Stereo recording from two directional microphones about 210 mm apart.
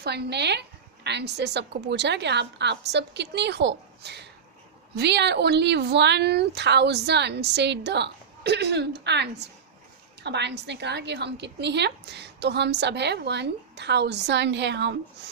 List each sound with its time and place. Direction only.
0.0 s a woman's voice: 50° right (ahead or behind)